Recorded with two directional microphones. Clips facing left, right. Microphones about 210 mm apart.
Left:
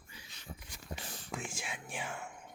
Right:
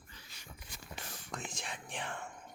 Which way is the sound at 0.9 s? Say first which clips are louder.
Left 4 dB; 30° left (ahead or behind).